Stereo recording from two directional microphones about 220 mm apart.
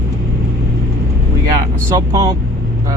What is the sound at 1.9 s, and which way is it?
Speech, 15° right (ahead or behind).